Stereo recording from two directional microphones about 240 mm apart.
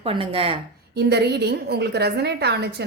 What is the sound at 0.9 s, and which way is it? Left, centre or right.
Speech, right.